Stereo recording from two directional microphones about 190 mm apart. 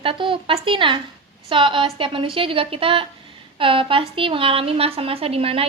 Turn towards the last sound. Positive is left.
turn(degrees=-30)  # may be behind; listen again after turning